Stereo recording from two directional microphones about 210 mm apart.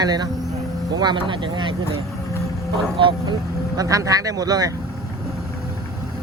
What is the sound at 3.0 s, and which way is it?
Speech, 25° right (ahead or behind).